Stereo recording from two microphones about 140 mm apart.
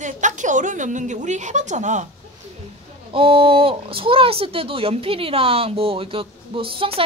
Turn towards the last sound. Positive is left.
turn(degrees=-40)  # may be behind; listen again after turning